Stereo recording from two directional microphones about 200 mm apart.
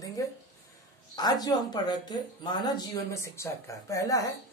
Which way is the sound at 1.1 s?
20° left (ahead or behind).